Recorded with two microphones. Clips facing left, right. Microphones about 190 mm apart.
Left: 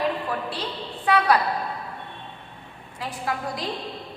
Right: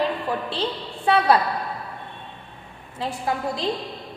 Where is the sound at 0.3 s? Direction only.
30° right (ahead or behind).